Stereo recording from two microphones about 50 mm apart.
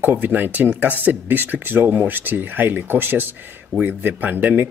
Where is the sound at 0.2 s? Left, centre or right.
Right.